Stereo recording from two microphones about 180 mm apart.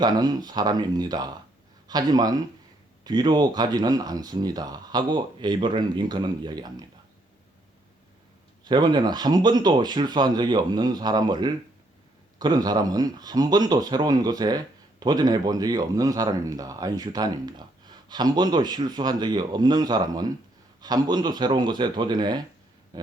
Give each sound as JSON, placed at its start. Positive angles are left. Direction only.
{"t": 0.0, "sound": "speech", "side_deg": -20}
{"t": 8.6, "sound": "speech", "side_deg": -25}